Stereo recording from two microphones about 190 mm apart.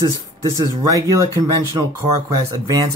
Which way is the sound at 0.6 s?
20° right (ahead or behind).